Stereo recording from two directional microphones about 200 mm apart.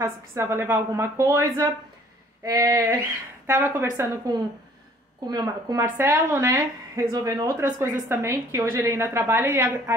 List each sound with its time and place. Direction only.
0.0 s a woman's voice: 15° right (ahead or behind)